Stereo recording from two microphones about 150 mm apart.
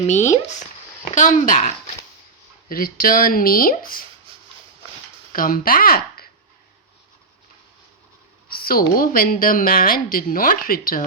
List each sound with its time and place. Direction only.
0.1 s speech: 50° left (ahead or behind)
2.6 s a woman's voice: 75° left (ahead or behind)
5.3 s speech: 70° left (ahead or behind)
8.4 s a woman's voice: 80° left